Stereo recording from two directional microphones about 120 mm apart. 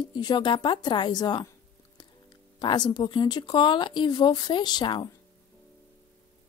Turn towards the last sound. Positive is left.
turn(degrees=40)  # may be behind; listen again after turning